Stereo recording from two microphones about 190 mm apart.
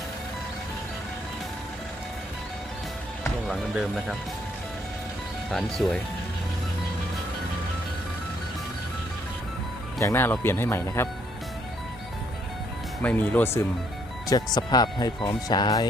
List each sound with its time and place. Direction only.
3.5 s speech: centre (ahead or behind)
5.5 s speech: centre (ahead or behind)
10.0 s speech: 15° left (ahead or behind)
13.0 s speech: 10° left (ahead or behind)